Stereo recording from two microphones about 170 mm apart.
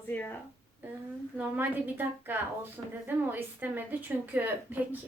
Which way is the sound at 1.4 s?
10° right (ahead or behind).